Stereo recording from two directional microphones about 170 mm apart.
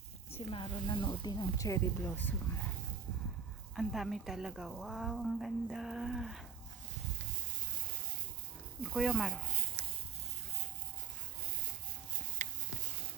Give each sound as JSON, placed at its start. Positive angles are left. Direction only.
{"t": 0.3, "sound": "speech", "side_deg": 30}
{"t": 3.8, "sound": "speech", "side_deg": 0}
{"t": 8.8, "sound": "speech", "side_deg": 0}
{"t": 12.4, "sound": "a sound", "side_deg": -45}